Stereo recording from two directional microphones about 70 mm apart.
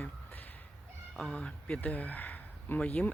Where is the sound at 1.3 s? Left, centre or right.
Centre.